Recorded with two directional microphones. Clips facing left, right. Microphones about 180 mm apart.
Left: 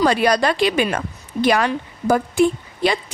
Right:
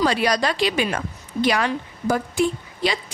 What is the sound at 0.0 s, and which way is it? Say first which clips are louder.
Speech: left 4 dB; 55° left (ahead or behind).